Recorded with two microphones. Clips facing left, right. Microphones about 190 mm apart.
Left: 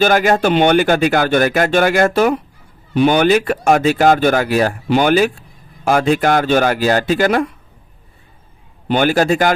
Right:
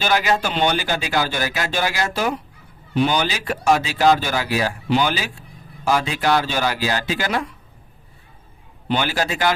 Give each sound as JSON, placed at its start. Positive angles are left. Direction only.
{"t": 0.0, "sound": "speech", "side_deg": 50}
{"t": 8.9, "sound": "speech", "side_deg": 50}